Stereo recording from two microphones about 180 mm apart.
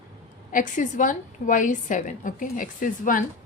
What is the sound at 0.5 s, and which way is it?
A woman's voice, 45° left (ahead or behind).